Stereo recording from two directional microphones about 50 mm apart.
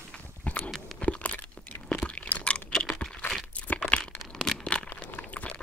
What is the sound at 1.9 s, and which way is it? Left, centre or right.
Crunch, left.